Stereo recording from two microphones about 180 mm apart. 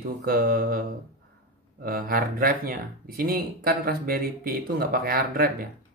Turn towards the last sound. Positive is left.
turn(degrees=-55)  # may be behind; listen again after turning